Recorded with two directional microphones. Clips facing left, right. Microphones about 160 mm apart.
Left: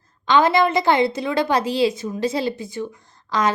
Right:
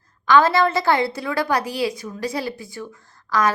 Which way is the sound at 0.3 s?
20° left (ahead or behind).